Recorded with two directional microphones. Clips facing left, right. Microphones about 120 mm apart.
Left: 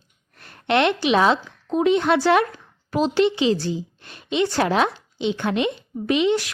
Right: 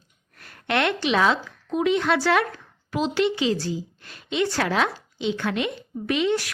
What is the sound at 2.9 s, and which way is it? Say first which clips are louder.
Speech: left 4 dB; 40° left (ahead or behind).